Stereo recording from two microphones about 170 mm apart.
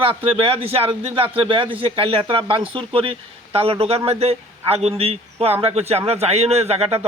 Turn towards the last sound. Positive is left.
turn(degrees=-35)  # may be behind; listen again after turning